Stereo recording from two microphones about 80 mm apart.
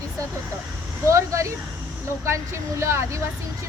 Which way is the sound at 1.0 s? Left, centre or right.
Right.